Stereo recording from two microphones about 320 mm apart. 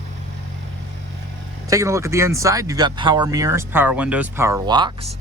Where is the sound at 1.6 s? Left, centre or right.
Centre.